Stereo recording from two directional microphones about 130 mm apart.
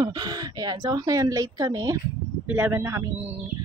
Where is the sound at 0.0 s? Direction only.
35° right (ahead or behind).